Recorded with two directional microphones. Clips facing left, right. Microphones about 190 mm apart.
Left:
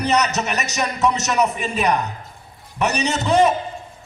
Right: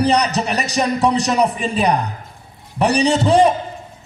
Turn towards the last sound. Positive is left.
turn(degrees=-35)  # may be behind; listen again after turning